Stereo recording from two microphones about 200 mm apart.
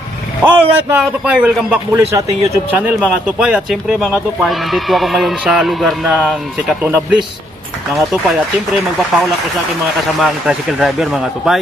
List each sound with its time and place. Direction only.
0.4 s a man's voice: 10° right (ahead or behind)
9.9 s a man's voice: centre (ahead or behind)